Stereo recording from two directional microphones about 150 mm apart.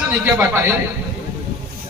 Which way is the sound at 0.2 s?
15° right (ahead or behind).